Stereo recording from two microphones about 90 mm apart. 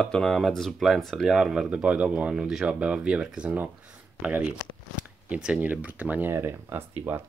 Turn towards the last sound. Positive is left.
turn(degrees=-20)  # may be behind; listen again after turning